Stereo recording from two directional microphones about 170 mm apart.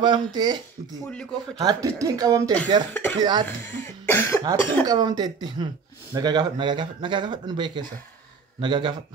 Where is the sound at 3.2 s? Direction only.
25° right (ahead or behind).